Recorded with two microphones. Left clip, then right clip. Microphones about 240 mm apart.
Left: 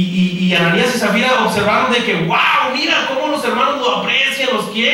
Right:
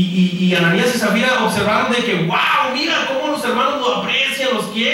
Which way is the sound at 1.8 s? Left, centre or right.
Centre.